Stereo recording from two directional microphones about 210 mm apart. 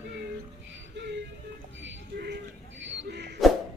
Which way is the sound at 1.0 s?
55° right (ahead or behind).